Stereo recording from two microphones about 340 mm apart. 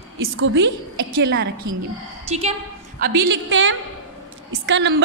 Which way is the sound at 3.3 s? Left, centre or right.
Right.